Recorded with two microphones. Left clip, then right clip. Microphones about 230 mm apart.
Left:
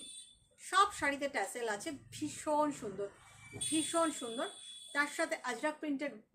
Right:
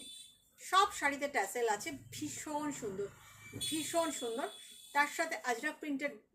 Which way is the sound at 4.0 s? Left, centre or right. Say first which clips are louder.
Right 1 dB; centre.